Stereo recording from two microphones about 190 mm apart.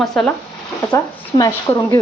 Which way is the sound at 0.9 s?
15° left (ahead or behind).